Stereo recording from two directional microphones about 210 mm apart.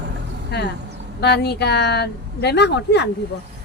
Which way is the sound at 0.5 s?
50° left (ahead or behind).